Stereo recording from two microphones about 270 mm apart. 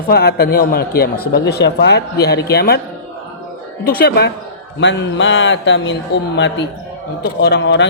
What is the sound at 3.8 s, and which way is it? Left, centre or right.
A man's voice, left.